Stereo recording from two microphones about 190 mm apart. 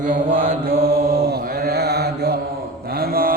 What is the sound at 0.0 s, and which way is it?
Mantra, 45° right (ahead or behind).